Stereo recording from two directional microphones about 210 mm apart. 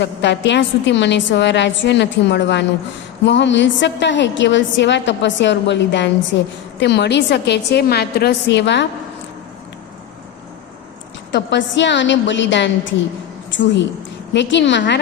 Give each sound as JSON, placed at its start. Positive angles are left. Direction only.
{"t": 0.0, "sound": "a woman's voice", "side_deg": 55}
{"t": 11.3, "sound": "a woman's voice", "side_deg": 55}